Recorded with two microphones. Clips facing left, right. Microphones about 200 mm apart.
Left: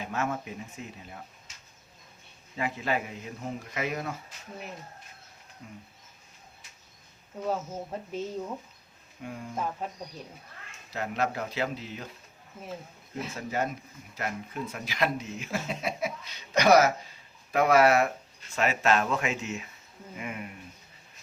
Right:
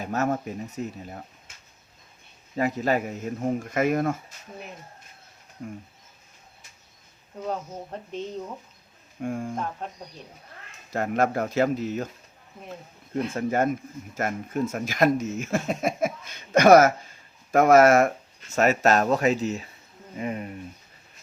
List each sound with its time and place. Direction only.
0.0 s speech: 40° right (ahead or behind)
2.6 s speech: 40° right (ahead or behind)
5.6 s speech: 50° right (ahead or behind)
7.4 s speech: 5° left (ahead or behind)
9.2 s speech: 50° right (ahead or behind)
9.6 s speech: 5° left (ahead or behind)
10.9 s speech: 50° right (ahead or behind)
12.6 s speech: centre (ahead or behind)
13.3 s speech: 50° right (ahead or behind); by 20.6 s 35° right (ahead or behind)